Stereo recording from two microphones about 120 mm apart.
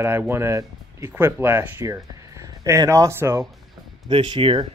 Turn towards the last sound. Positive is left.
turn(degrees=-45)  # may be behind; listen again after turning